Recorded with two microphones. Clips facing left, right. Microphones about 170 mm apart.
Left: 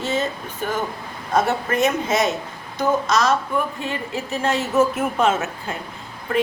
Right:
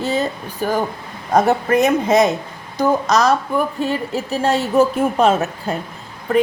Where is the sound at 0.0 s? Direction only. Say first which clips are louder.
Right 3 dB; 35° right (ahead or behind).